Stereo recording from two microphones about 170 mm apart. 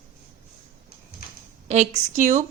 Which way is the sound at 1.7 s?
40° right (ahead or behind).